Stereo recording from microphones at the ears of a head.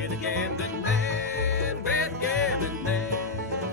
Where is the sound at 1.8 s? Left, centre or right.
Left.